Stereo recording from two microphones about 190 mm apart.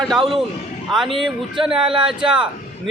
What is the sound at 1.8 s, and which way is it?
Speech, 25° right (ahead or behind).